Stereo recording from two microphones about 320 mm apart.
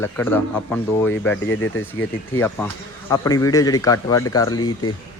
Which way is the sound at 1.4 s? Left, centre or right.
Left.